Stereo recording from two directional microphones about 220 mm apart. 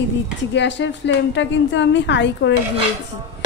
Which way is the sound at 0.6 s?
55° left (ahead or behind).